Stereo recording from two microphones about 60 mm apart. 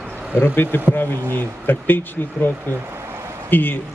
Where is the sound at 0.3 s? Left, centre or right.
Left.